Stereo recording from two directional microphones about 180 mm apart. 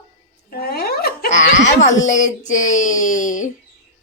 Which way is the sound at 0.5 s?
60° left (ahead or behind).